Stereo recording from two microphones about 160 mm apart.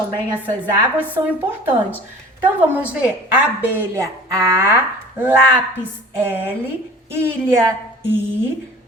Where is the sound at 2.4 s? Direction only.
10° right (ahead or behind).